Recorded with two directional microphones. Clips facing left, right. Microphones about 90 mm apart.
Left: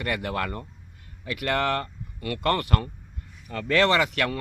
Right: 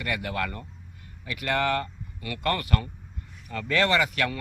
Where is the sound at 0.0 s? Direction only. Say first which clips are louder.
Left 2 dB; 50° left (ahead or behind).